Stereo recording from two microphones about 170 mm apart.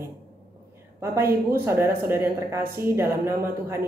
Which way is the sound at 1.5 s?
15° right (ahead or behind).